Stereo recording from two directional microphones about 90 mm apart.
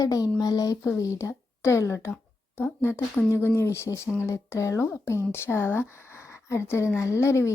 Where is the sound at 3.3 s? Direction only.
30° left (ahead or behind).